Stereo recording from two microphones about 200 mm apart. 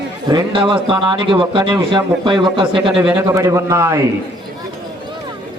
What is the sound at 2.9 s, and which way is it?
A man's voice, 5° right (ahead or behind).